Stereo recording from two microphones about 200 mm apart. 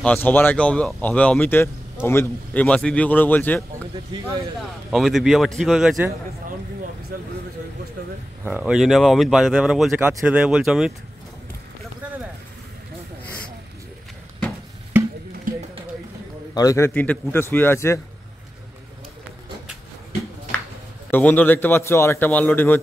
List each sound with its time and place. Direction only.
0.0 s speech: 10° left (ahead or behind)
4.1 s speech: 20° right (ahead or behind)
4.6 s speech: centre (ahead or behind)
7.1 s speech: 45° right (ahead or behind)
8.5 s speech: 5° right (ahead or behind)
15.5 s a sound: 45° right (ahead or behind)
16.5 s speech: 15° left (ahead or behind)
21.1 s speech: 10° left (ahead or behind)